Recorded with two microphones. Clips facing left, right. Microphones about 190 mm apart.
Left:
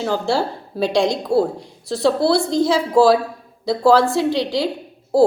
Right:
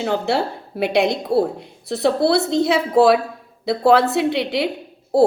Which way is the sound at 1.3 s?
5° right (ahead or behind).